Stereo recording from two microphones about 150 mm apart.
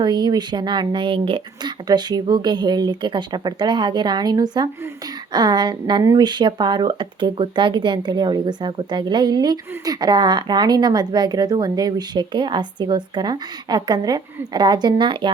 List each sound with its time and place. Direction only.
0.0 s speech: 30° right (ahead or behind)